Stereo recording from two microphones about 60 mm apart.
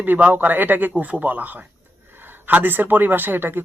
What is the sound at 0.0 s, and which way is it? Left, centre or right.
A man's voice, right.